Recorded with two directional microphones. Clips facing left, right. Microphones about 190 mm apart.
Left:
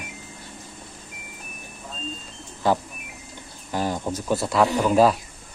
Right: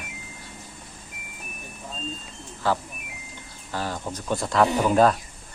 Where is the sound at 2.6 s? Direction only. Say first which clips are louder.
Left 3 dB; 15° left (ahead or behind).